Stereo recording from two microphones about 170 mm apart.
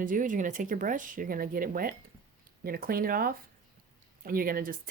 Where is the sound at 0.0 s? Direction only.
50° right (ahead or behind).